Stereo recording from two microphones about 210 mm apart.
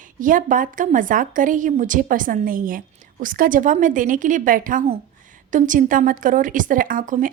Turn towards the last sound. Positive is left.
turn(degrees=-40)  # may be behind; listen again after turning